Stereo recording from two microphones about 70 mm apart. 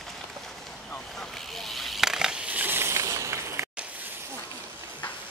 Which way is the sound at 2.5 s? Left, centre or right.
Right.